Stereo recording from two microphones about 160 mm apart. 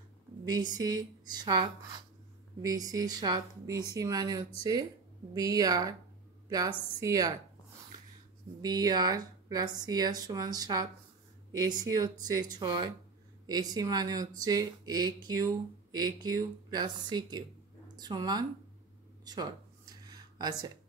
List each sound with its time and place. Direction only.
0.7 s speech: 25° right (ahead or behind)
8.5 s speech: 25° right (ahead or behind)
19.2 s a sound: 25° right (ahead or behind)